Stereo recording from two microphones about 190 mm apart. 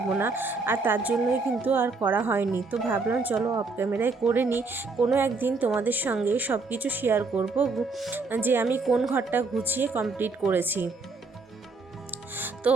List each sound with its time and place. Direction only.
0.1 s speech: 10° right (ahead or behind)